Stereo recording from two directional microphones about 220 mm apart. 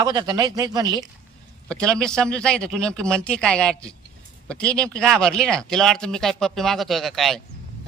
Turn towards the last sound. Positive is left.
turn(degrees=0)  # may be behind; listen again after turning